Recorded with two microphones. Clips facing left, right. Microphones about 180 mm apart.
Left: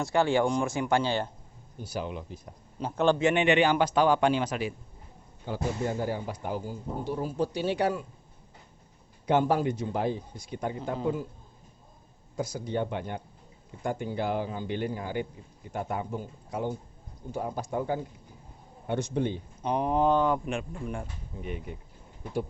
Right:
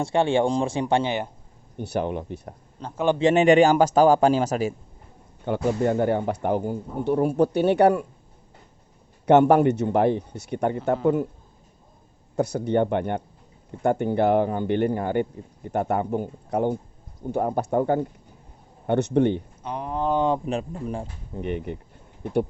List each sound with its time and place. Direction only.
0.0 s speech: 25° right (ahead or behind)
1.8 s speech: 60° right (ahead or behind)
2.9 s a man's voice: 10° right (ahead or behind)
3.2 s a man's voice: 35° right (ahead or behind)
5.5 s speech: 65° right (ahead or behind)
9.2 s speech: 70° right (ahead or behind)
12.4 s speech: 65° right (ahead or behind)
19.6 s speech: 20° left (ahead or behind)
20.1 s speech: 25° right (ahead or behind)
20.4 s a man's voice: 35° right (ahead or behind)
21.3 s speech: 65° right (ahead or behind)